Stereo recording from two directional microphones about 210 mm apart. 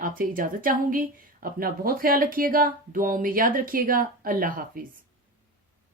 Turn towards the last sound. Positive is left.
turn(degrees=-45)  # may be behind; listen again after turning